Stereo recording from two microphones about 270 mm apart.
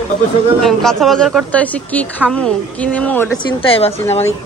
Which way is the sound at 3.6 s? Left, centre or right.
Left.